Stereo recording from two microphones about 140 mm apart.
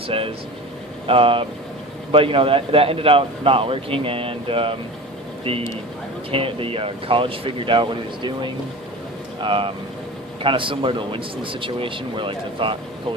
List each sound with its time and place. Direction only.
0.1 s speech: 40° right (ahead or behind)